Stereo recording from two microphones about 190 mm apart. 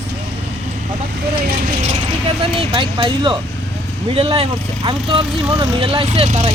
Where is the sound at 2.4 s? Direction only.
25° right (ahead or behind).